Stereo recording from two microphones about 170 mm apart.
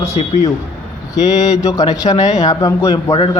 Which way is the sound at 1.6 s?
20° left (ahead or behind).